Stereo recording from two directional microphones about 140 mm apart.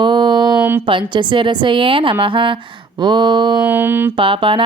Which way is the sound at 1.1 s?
35° right (ahead or behind).